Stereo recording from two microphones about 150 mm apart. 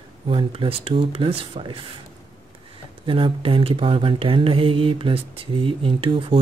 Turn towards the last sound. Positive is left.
turn(degrees=-35)  # may be behind; listen again after turning